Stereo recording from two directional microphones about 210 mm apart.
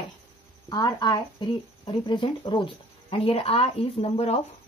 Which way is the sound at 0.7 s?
20° left (ahead or behind).